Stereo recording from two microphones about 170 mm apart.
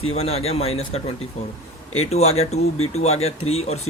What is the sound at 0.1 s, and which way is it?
Speech, 35° left (ahead or behind).